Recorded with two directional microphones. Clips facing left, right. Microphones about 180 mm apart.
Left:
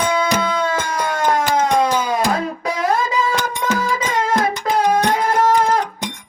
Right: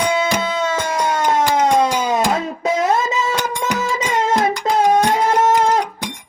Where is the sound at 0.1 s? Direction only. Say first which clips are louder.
Even; 25° right (ahead or behind).